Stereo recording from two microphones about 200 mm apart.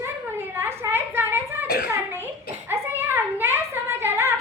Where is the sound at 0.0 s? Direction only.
10° right (ahead or behind).